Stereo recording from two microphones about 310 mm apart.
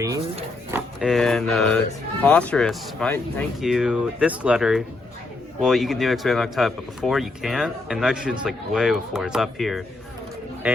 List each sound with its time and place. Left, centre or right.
0.0 s speech: centre
0.9 s speech: centre